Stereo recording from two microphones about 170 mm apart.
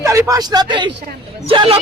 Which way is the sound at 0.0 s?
20° right (ahead or behind).